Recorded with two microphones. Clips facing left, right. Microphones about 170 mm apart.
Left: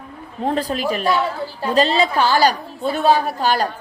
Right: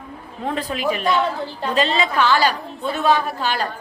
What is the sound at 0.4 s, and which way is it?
Speech, 35° left (ahead or behind).